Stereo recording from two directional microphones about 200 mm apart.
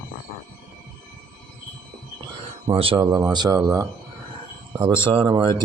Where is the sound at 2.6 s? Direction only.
25° right (ahead or behind).